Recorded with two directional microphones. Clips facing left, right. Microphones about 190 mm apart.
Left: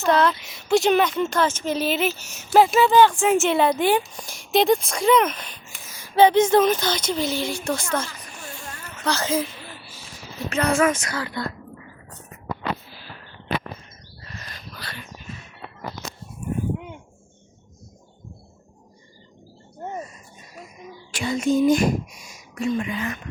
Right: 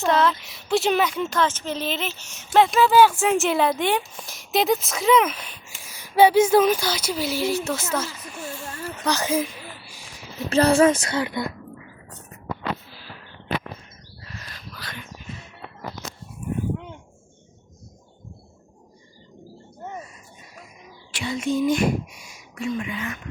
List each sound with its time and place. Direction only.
0.0 s speech: centre (ahead or behind)
1.5 s speech: 15° left (ahead or behind); by 8.1 s 5° right (ahead or behind)
9.0 s a sound: 15° right (ahead or behind)
10.5 s speech: 30° right (ahead or behind); by 11.5 s 15° right (ahead or behind)
14.3 s bird: centre (ahead or behind)
21.1 s speech: 45° left (ahead or behind)